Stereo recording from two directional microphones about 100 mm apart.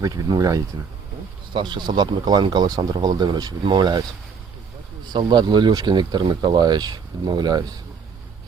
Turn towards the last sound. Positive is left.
turn(degrees=-45)  # may be behind; listen again after turning